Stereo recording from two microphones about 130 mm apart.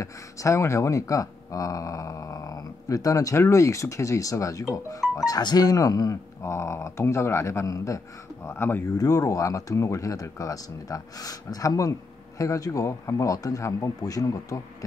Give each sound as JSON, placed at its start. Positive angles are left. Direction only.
{"t": 0.0, "sound": "speech", "side_deg": 25}
{"t": 8.9, "sound": "speech", "side_deg": 30}